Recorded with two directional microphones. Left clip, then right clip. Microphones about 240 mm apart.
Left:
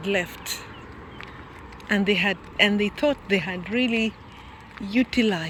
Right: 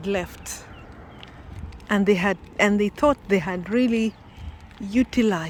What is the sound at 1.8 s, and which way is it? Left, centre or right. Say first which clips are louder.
Speech: right 1 dB; centre.